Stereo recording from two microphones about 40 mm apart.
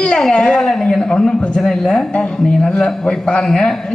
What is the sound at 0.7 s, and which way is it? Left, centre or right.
Speech, centre.